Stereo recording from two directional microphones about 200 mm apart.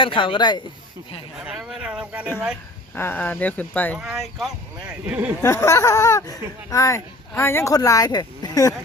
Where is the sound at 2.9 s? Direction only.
10° left (ahead or behind); by 5.3 s 5° right (ahead or behind).